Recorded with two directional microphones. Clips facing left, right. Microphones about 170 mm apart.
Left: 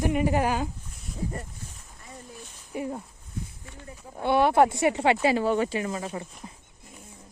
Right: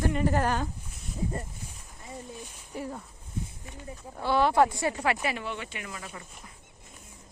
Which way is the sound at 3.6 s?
15° right (ahead or behind).